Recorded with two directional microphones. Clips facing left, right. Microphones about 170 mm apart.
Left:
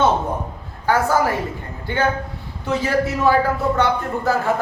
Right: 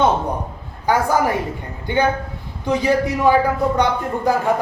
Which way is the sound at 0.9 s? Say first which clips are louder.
Right 1 dB; 15° right (ahead or behind).